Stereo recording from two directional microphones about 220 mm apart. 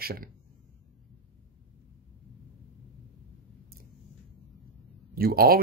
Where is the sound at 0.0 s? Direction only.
45° right (ahead or behind).